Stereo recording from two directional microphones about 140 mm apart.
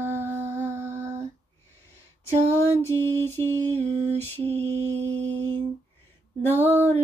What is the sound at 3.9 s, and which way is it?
Mantra, 50° right (ahead or behind).